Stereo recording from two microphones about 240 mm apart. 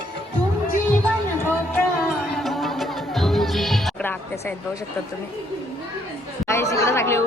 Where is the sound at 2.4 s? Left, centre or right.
Centre.